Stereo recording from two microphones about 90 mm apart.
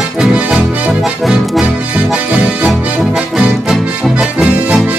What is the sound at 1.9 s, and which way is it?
Music, 10° right (ahead or behind).